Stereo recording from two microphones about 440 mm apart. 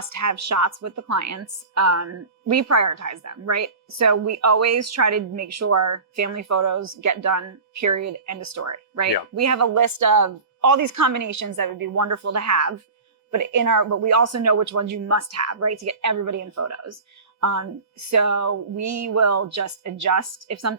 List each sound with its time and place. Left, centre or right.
0.0 s a woman's voice: right